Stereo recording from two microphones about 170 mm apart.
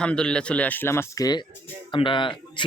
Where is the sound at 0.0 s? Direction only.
5° left (ahead or behind).